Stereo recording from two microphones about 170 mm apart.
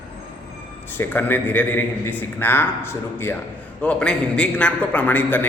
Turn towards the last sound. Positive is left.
turn(degrees=10)  # may be behind; listen again after turning